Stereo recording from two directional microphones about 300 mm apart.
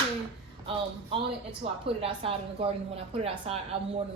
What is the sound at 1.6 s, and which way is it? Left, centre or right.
A woman's voice, centre.